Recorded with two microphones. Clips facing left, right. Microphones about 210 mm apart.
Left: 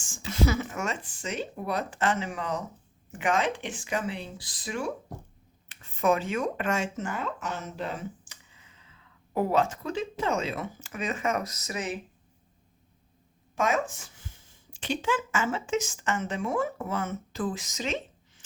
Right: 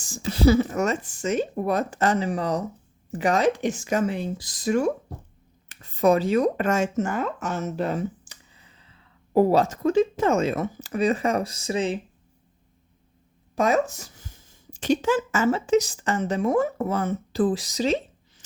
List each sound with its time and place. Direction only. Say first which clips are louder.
0.0 s speech: right 7 dB; 40° right (ahead or behind)
13.6 s speech: right 6 dB; 35° right (ahead or behind)